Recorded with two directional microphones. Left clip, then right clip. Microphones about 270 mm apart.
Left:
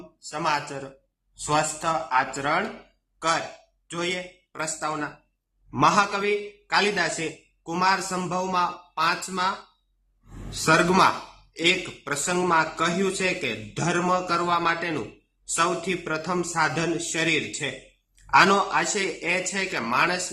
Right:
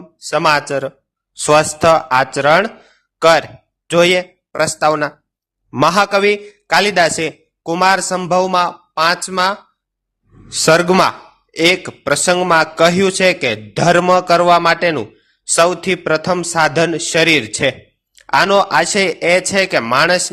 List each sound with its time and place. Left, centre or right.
0.3 s a man's voice: right
10.7 s a man's voice: right